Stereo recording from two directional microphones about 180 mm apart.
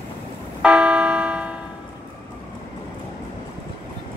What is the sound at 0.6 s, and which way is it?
Church bell, 5° right (ahead or behind).